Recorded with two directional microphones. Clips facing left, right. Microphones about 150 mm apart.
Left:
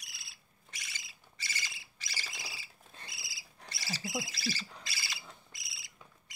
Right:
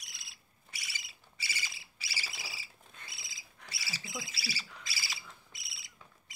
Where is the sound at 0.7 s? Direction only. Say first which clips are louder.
Right 1 dB; 5° right (ahead or behind).